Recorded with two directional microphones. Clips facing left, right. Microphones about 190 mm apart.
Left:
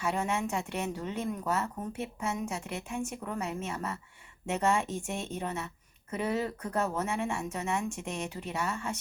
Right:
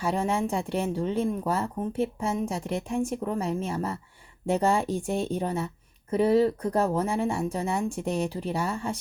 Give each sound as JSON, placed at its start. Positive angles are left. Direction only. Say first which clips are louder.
{"t": 0.0, "sound": "a woman's voice", "louder": "right 5 dB", "side_deg": -35}